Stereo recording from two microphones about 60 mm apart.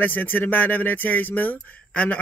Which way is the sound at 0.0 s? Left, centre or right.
Left.